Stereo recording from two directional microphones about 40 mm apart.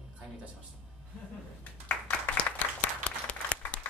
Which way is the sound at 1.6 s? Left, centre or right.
Left.